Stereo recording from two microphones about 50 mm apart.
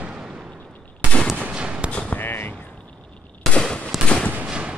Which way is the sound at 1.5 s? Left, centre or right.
Centre.